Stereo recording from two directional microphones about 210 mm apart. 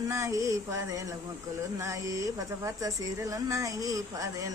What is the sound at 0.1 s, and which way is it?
Speech, 15° right (ahead or behind).